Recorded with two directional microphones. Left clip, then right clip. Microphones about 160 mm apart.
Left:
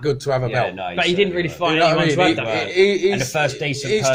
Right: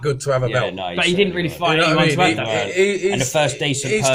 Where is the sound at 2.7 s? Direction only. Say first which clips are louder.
Left 4 dB; 40° left (ahead or behind).